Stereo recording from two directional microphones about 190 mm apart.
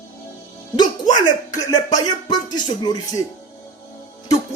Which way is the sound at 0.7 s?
25° left (ahead or behind).